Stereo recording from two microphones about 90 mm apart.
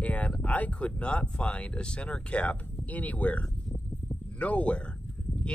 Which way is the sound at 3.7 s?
25° left (ahead or behind).